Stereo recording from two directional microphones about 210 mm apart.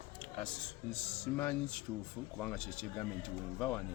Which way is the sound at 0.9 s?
5° left (ahead or behind).